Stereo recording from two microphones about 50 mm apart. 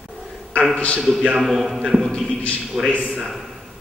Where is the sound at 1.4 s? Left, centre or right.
Centre.